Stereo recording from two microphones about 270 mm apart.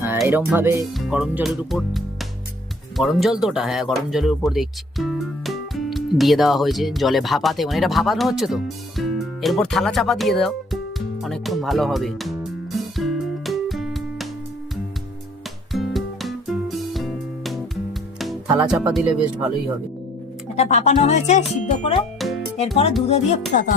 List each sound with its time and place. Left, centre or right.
0.0 s speech: centre
11.2 s music: centre
15.7 s music: centre
18.6 s speech: centre
20.6 s speech: left